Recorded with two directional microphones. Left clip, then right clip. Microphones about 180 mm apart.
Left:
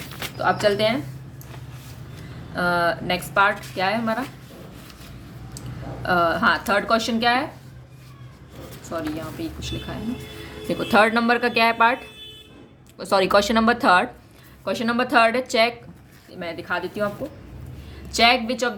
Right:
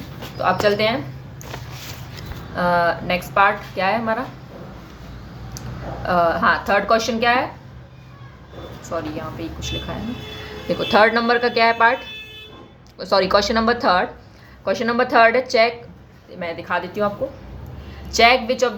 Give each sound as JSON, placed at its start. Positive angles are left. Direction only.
{"t": 0.3, "sound": "speech", "side_deg": 25}
{"t": 2.6, "sound": "speech", "side_deg": 25}
{"t": 6.1, "sound": "speech", "side_deg": 30}
{"t": 8.9, "sound": "speech", "side_deg": 25}
{"t": 10.9, "sound": "speech", "side_deg": 30}
{"t": 13.1, "sound": "speech", "side_deg": 35}
{"t": 14.6, "sound": "speech", "side_deg": 20}
{"t": 18.1, "sound": "speech", "side_deg": 25}